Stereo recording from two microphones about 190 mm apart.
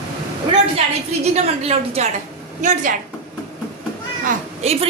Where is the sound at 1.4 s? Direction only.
35° right (ahead or behind).